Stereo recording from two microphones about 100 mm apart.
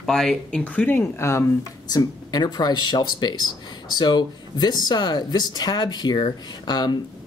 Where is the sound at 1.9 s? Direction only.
40° left (ahead or behind).